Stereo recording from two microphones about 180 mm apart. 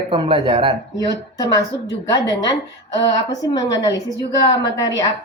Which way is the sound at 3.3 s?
20° left (ahead or behind).